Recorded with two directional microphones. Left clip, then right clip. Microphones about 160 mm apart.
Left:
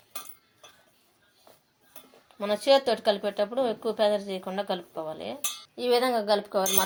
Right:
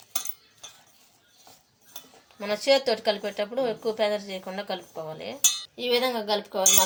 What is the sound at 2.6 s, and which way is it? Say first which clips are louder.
Speech: even; 30° left (ahead or behind).